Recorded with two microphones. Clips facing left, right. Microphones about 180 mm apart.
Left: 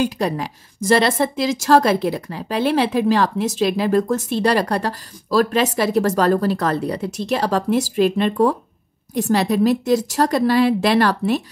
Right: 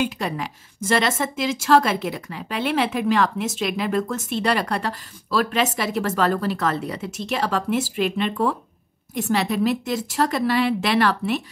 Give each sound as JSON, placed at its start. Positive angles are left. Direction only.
{"t": 0.0, "sound": "a woman's voice", "side_deg": 35}